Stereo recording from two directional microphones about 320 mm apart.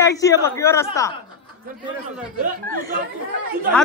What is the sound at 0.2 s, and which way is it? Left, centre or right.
Speech, centre.